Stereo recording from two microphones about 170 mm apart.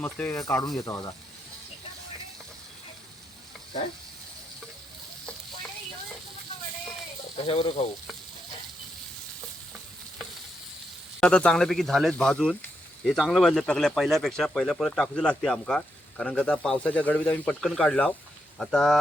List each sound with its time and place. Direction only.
0.0 s speech: 10° left (ahead or behind)
7.3 s speech: 35° left (ahead or behind)
11.2 s speech: 5° left (ahead or behind)